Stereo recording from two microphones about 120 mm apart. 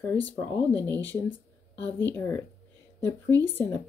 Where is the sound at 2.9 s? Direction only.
20° left (ahead or behind).